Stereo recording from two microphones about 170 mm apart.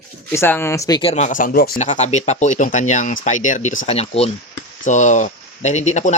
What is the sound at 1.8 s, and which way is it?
Speech, 45° left (ahead or behind).